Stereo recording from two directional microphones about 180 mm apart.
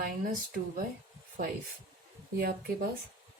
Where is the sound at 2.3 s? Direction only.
60° right (ahead or behind).